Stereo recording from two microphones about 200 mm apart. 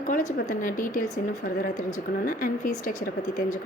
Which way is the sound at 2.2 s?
45° left (ahead or behind).